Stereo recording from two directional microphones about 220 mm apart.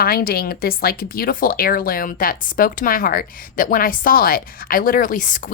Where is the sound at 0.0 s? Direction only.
40° left (ahead or behind).